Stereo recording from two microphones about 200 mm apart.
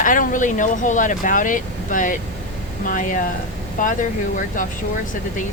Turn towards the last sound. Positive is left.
turn(degrees=40)  # may be behind; listen again after turning